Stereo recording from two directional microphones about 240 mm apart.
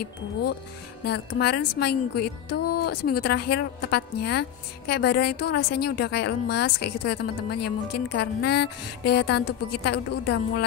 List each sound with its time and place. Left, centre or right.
0.0 s a woman's voice: left